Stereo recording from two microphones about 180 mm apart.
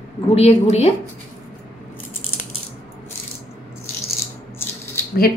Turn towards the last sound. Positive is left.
turn(degrees=15)  # may be behind; listen again after turning